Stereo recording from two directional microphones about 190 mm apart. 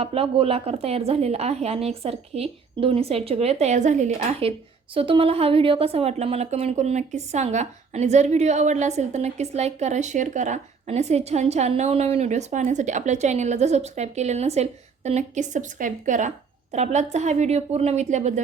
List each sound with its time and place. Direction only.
0.0 s a woman's voice: 30° right (ahead or behind)